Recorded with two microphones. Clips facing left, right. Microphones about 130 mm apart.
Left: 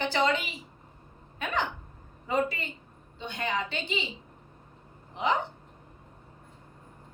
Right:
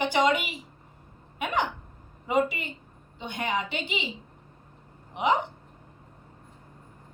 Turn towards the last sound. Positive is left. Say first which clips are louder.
# right 3 dB
turn(degrees=-15)  # may be behind; listen again after turning